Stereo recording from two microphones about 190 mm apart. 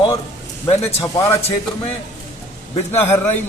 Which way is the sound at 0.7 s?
35° left (ahead or behind).